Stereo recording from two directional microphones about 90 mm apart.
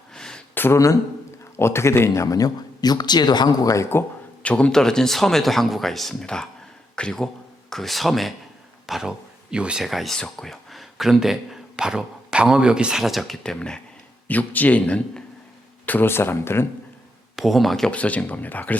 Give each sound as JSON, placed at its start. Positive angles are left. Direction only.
{"t": 0.1, "sound": "a sound", "side_deg": 5}
{"t": 0.5, "sound": "a sound", "side_deg": 25}
{"t": 1.5, "sound": "speech", "side_deg": 30}
{"t": 4.4, "sound": "a man's voice", "side_deg": 10}
{"t": 14.3, "sound": "speech", "side_deg": 20}
{"t": 17.3, "sound": "speech", "side_deg": 0}